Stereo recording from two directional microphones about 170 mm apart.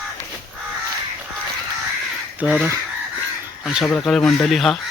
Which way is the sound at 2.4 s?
5° right (ahead or behind).